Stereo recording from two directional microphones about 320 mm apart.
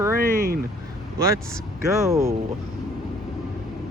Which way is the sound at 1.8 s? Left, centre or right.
Centre.